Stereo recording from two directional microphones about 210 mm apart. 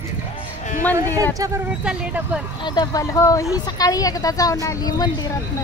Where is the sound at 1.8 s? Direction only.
5° right (ahead or behind).